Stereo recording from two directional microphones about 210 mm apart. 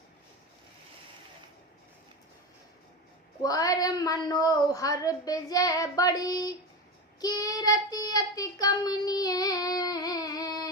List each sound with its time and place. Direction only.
3.4 s a woman's voice: 15° left (ahead or behind)
7.2 s child singing: 15° left (ahead or behind)